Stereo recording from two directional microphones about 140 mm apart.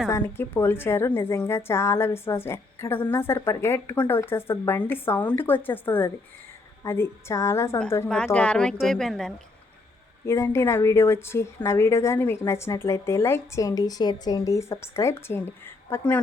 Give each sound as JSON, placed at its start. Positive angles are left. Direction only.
{"t": 0.1, "sound": "a woman's voice", "side_deg": 15}
{"t": 8.1, "sound": "speech", "side_deg": 5}
{"t": 10.2, "sound": "a woman's voice", "side_deg": 20}